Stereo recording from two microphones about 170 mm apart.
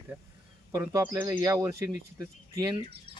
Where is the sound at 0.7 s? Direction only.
15° right (ahead or behind).